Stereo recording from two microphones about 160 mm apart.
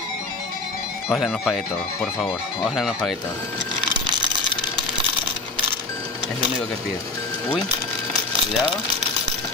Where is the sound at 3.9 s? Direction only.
30° right (ahead or behind).